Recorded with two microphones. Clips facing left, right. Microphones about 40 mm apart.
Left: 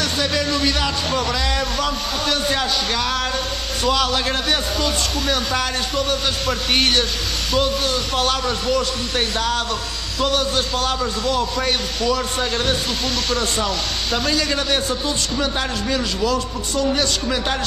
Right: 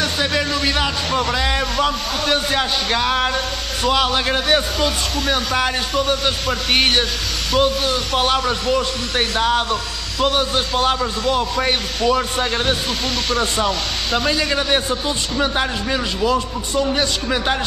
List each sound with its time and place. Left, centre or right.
0.0 s speech: centre